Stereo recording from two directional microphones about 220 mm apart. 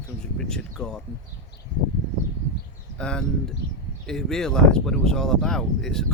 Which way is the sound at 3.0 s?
5° left (ahead or behind).